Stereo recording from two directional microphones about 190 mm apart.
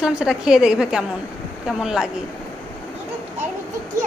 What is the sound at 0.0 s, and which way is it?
A woman's voice, 5° right (ahead or behind).